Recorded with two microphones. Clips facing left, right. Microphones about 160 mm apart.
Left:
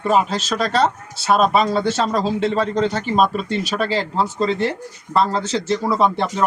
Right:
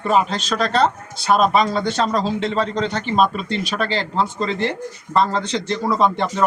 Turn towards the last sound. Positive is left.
turn(degrees=5)  # may be behind; listen again after turning